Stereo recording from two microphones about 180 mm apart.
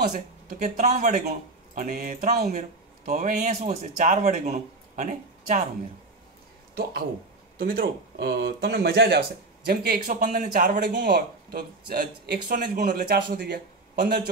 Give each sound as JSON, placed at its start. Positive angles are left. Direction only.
{"t": 0.1, "sound": "speech", "side_deg": -40}
{"t": 3.1, "sound": "speech", "side_deg": -45}
{"t": 7.5, "sound": "a man's voice", "side_deg": -50}
{"t": 9.7, "sound": "speech", "side_deg": -55}
{"t": 11.0, "sound": "a man's voice", "side_deg": -60}